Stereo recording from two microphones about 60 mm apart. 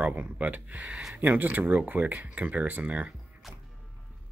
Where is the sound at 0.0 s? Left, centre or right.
Right.